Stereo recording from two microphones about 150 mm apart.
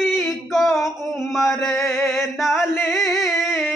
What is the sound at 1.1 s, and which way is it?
Mantra, 5° right (ahead or behind).